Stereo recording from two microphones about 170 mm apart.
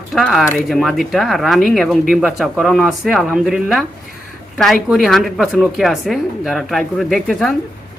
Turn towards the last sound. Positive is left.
turn(degrees=0)  # may be behind; listen again after turning